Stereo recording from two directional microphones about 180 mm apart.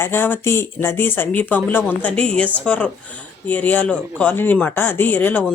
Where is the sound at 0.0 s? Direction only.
10° left (ahead or behind).